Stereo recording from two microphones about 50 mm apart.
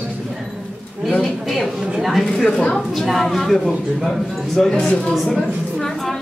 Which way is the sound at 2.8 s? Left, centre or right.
Centre.